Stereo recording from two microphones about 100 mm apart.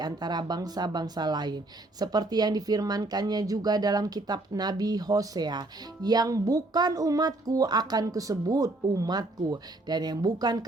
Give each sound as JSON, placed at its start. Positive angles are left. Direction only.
{"t": 0.0, "sound": "speech", "side_deg": -45}